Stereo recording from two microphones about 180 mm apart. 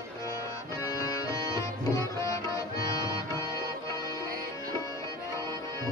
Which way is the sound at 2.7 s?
20° left (ahead or behind).